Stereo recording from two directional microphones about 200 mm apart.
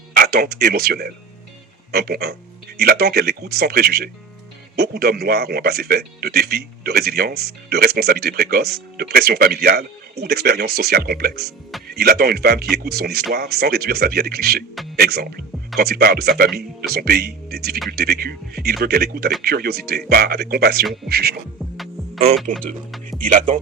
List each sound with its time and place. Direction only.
0.1 s a man's voice: 50° right (ahead or behind)
22.4 s speech: centre (ahead or behind)